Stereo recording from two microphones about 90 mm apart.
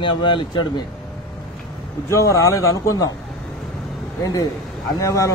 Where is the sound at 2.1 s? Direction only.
35° left (ahead or behind).